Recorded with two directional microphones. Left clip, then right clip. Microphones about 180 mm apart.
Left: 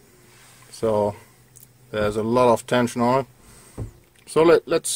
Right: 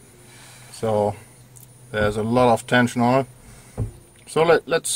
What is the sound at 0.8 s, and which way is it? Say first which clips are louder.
Speech: even; 35° left (ahead or behind).